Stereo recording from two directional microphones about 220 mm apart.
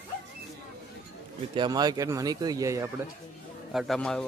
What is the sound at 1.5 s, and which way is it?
Speech, 20° right (ahead or behind).